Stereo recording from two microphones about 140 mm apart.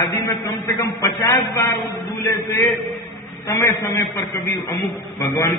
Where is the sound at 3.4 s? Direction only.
20° left (ahead or behind).